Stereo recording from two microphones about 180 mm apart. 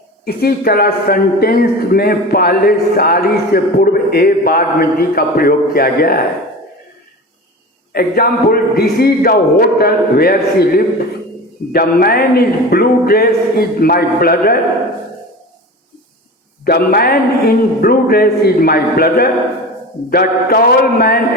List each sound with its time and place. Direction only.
0.3 s a man's voice: 55° left (ahead or behind)
7.9 s a man's voice: 55° left (ahead or behind)
16.6 s a man's voice: 55° left (ahead or behind)